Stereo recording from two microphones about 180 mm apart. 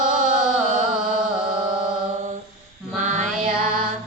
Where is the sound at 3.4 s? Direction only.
50° right (ahead or behind).